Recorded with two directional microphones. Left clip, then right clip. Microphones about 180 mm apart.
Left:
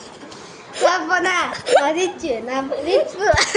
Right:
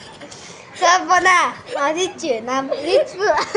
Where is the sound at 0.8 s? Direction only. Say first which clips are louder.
Right 3 dB; 40° right (ahead or behind).